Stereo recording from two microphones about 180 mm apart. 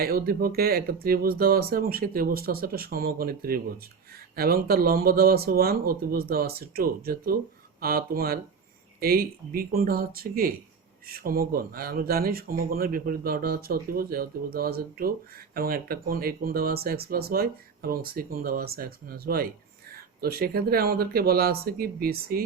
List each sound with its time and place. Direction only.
0.0 s speech: 55° right (ahead or behind)